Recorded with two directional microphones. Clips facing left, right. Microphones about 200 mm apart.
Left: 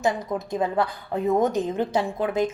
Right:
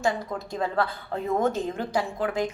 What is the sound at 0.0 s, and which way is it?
A woman's voice, 20° left (ahead or behind).